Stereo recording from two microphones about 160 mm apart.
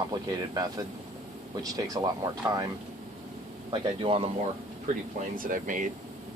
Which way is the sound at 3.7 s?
30° right (ahead or behind).